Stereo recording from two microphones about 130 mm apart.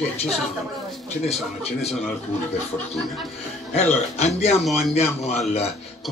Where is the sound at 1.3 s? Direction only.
55° left (ahead or behind).